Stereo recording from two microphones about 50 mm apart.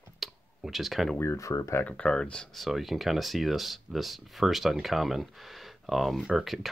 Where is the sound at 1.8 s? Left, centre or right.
Left.